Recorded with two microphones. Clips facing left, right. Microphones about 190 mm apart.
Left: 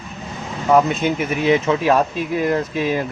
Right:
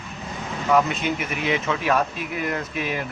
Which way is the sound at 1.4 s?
35° left (ahead or behind).